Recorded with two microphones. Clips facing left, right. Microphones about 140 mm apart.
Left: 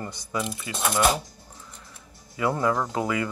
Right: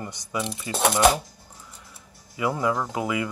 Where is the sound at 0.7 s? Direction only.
30° right (ahead or behind).